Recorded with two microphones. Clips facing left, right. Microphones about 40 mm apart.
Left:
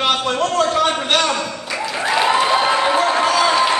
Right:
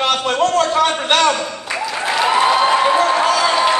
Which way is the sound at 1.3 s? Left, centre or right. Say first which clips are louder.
Right 1 dB; right.